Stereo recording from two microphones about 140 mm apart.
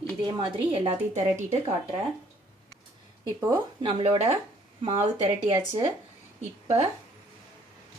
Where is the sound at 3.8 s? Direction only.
40° right (ahead or behind).